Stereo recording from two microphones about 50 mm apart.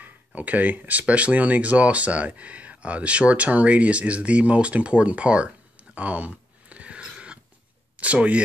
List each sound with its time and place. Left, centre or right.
0.0 s speech: right
5.9 s a sound: right
8.0 s speech: right